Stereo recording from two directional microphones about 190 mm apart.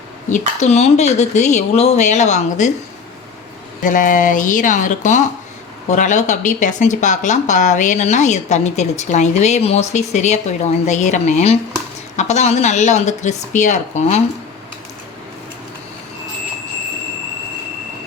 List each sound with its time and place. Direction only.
0.3 s speech: 40° left (ahead or behind)
3.8 s speech: 45° left (ahead or behind)